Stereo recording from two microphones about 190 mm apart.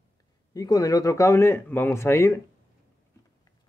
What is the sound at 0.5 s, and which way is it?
Speech, 20° left (ahead or behind).